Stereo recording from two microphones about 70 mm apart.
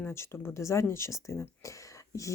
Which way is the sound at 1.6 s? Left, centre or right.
Left.